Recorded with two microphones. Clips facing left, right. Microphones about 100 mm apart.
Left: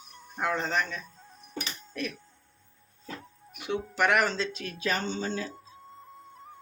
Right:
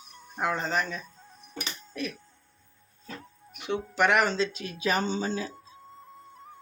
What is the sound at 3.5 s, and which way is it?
Speech, 5° left (ahead or behind).